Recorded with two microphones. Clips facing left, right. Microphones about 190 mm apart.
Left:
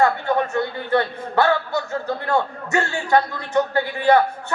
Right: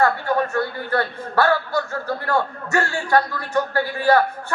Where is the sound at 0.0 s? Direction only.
20° left (ahead or behind).